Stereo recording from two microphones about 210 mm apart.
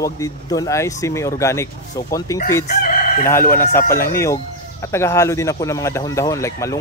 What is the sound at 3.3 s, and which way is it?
Speech, 10° left (ahead or behind).